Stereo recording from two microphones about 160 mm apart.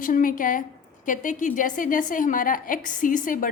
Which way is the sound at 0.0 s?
60° left (ahead or behind).